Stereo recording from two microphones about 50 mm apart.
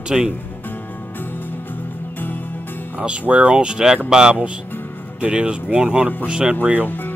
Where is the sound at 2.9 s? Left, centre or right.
Right.